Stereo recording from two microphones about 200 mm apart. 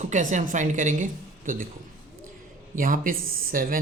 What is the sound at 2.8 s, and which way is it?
Speech, 45° right (ahead or behind).